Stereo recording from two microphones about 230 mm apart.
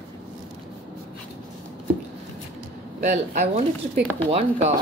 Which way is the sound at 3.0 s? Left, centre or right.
Right.